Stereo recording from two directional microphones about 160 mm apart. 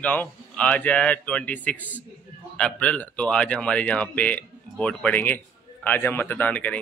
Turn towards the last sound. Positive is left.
turn(degrees=10)  # may be behind; listen again after turning